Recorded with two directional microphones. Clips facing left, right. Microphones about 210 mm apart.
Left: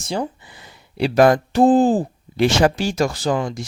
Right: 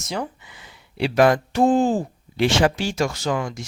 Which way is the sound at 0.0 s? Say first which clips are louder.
Left 4 dB; 30° left (ahead or behind).